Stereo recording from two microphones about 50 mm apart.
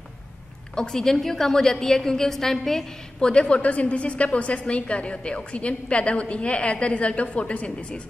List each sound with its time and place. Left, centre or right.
0.7 s a woman's voice: centre
3.2 s a woman's voice: centre